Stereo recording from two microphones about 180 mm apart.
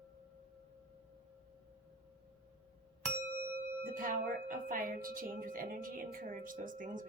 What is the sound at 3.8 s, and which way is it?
Speech, 50° right (ahead or behind).